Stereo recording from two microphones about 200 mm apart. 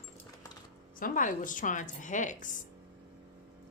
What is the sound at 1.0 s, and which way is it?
A woman's voice, 40° left (ahead or behind).